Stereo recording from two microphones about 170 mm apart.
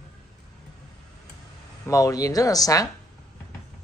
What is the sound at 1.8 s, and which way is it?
Speech, 20° left (ahead or behind).